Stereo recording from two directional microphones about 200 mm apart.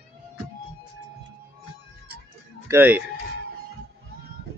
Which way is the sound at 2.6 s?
10° right (ahead or behind).